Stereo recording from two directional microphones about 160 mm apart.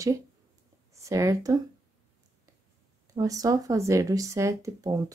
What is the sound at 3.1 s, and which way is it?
A woman's voice, 20° right (ahead or behind).